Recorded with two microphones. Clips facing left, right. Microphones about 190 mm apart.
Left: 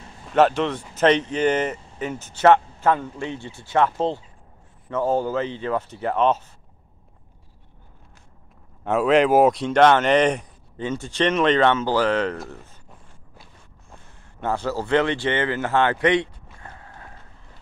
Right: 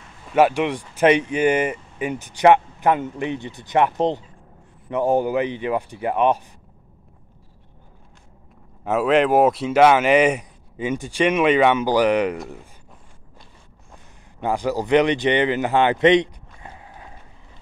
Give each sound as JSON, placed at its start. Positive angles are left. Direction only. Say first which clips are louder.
{"t": 0.3, "sound": "speech", "louder": "right 1 dB", "side_deg": -10}
{"t": 8.8, "sound": "speech", "louder": "even", "side_deg": 0}
{"t": 14.4, "sound": "speech", "louder": "right 3 dB", "side_deg": -15}
{"t": 16.6, "sound": "mechanisms", "louder": "right 2 dB", "side_deg": -15}